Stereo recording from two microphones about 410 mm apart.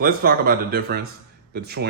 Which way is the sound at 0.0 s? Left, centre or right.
Right.